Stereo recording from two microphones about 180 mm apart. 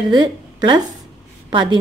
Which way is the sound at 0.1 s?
25° right (ahead or behind).